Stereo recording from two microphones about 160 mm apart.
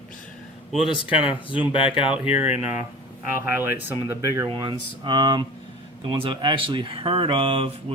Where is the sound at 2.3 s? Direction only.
40° left (ahead or behind).